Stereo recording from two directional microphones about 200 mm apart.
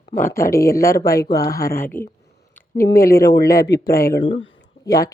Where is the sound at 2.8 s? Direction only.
50° left (ahead or behind).